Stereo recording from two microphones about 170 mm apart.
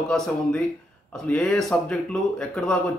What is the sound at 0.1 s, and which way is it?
Speech, 5° left (ahead or behind).